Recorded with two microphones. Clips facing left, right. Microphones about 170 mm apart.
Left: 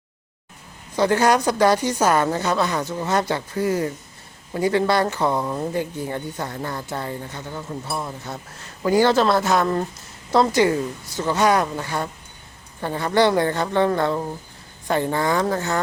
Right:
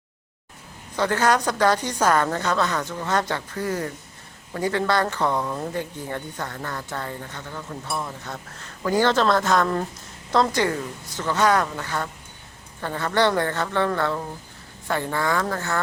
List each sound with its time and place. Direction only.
0.9 s a woman's voice: 10° left (ahead or behind)